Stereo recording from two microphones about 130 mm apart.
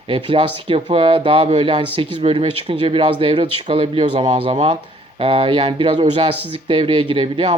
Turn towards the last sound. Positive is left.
turn(degrees=-45)  # may be behind; listen again after turning